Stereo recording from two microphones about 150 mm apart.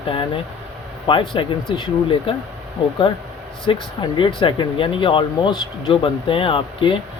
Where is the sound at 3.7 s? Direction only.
35° left (ahead or behind).